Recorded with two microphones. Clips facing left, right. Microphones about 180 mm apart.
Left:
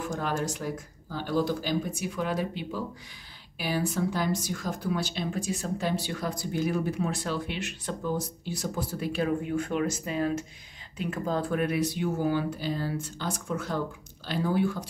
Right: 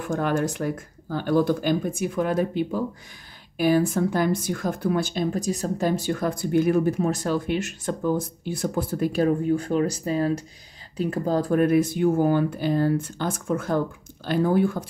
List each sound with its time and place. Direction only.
0.0 s speech: 55° right (ahead or behind)